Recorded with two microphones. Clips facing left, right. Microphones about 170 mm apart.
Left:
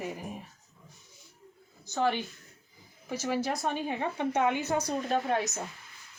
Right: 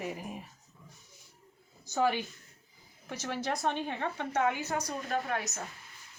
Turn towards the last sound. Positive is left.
turn(degrees=25)  # may be behind; listen again after turning